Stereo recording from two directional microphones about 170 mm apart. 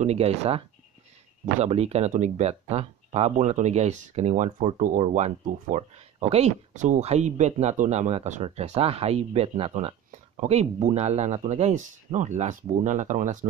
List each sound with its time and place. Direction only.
0.0 s speech: 40° right (ahead or behind)